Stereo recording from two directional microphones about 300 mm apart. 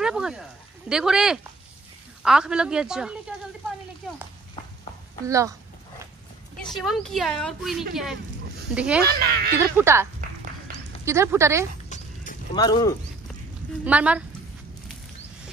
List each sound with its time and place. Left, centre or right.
0.0 s speech: centre
5.2 s a sound: centre
6.5 s speech: centre
9.0 s speech: right
9.6 s a woman's voice: centre
11.1 s a woman's voice: centre
11.9 s a sound: left
12.5 s speech: centre
13.8 s speech: centre